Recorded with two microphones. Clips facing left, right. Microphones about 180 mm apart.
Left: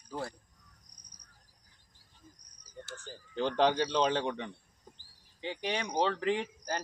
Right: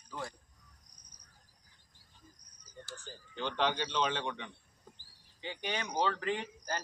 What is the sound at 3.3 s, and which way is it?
A man's voice, 40° left (ahead or behind).